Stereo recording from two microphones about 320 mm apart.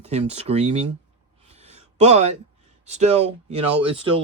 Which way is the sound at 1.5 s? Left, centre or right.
Centre.